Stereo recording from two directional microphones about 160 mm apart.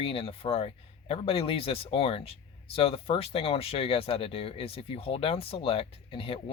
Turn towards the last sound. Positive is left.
turn(degrees=35)  # may be behind; listen again after turning